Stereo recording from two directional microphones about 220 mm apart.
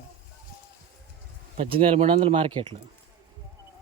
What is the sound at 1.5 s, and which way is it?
A man's voice, 25° right (ahead or behind).